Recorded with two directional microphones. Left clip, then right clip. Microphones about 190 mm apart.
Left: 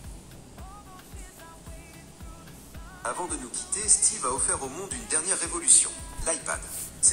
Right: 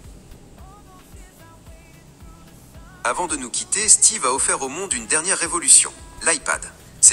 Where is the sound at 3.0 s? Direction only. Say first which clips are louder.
Right 10 dB; 45° right (ahead or behind).